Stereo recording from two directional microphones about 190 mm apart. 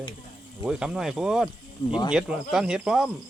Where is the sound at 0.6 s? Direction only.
5° right (ahead or behind).